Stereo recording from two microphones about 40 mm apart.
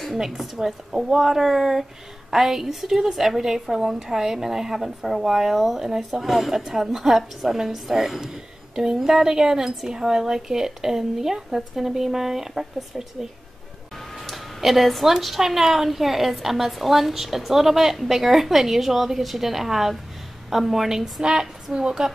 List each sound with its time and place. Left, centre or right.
0.2 s a woman's voice: centre
14.1 s a sound: centre
15.1 s a woman's voice: centre
21.2 s a woman's voice: right